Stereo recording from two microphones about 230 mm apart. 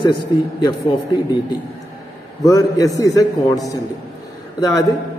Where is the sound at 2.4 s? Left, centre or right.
Centre.